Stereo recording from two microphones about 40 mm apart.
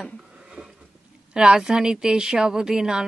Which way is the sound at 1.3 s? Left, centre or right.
Centre.